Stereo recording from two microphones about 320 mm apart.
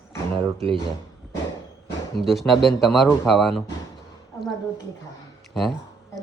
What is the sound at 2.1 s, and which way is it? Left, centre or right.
Speech, centre.